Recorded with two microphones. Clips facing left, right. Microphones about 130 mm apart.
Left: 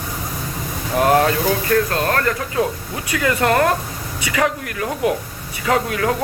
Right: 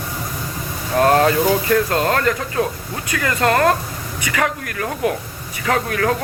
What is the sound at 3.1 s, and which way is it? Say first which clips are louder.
Speech: left 1 dB; 15° left (ahead or behind).